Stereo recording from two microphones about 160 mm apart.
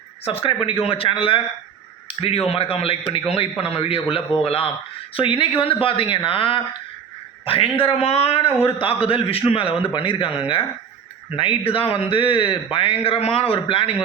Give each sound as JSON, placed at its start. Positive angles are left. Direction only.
{"t": 0.3, "sound": "a man's voice", "side_deg": 35}
{"t": 8.4, "sound": "speech", "side_deg": 15}
{"t": 8.8, "sound": "a man's voice", "side_deg": 35}